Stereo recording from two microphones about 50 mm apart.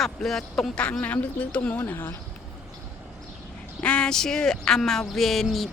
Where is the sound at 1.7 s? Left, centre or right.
Left.